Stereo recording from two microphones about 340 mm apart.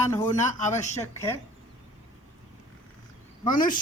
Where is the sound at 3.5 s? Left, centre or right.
Left.